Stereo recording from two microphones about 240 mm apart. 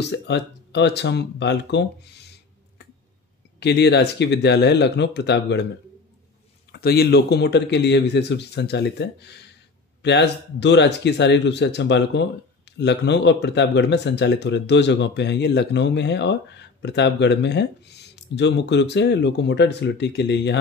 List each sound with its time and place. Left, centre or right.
0.0 s speech: left
3.5 s speech: left
6.7 s speech: left